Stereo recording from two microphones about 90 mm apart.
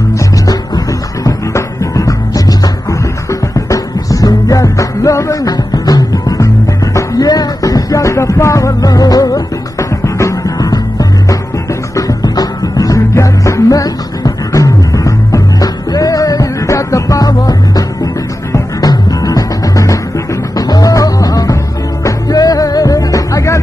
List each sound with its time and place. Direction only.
0.5 s music: 40° left (ahead or behind)